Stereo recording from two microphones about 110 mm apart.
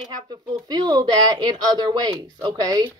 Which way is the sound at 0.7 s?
40° right (ahead or behind).